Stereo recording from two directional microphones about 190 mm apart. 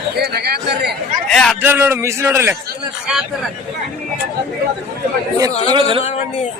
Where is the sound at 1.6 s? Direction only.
10° right (ahead or behind).